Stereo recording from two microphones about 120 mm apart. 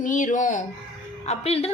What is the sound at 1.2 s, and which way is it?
Speech, 60° left (ahead or behind).